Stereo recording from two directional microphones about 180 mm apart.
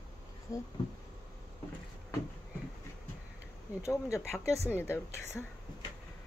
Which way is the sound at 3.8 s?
15° left (ahead or behind).